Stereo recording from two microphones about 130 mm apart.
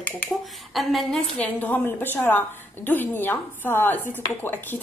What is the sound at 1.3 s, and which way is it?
A woman's voice, 10° left (ahead or behind).